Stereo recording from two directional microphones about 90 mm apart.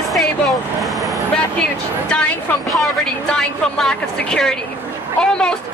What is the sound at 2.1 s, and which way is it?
Speech, 10° left (ahead or behind).